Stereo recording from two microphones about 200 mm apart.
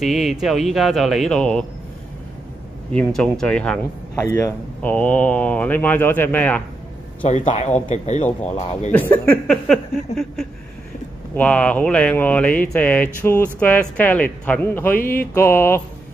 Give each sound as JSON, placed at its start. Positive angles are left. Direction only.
{"t": 0.0, "sound": "speech", "side_deg": 0}
{"t": 2.9, "sound": "speech", "side_deg": 5}
{"t": 7.2, "sound": "speech", "side_deg": 35}
{"t": 8.9, "sound": "speech", "side_deg": 10}
{"t": 11.3, "sound": "speech", "side_deg": 5}